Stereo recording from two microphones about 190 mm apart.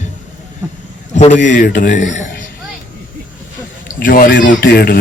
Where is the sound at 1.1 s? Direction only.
40° left (ahead or behind).